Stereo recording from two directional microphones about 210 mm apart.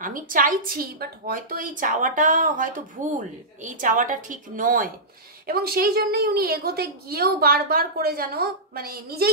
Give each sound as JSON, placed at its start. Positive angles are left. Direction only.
{"t": 0.0, "sound": "a woman's voice", "side_deg": -40}